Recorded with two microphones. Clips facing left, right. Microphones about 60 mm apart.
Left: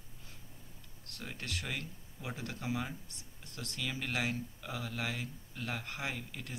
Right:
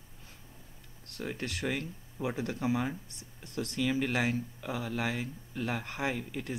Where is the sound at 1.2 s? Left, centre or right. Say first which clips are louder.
Right 7 dB; centre.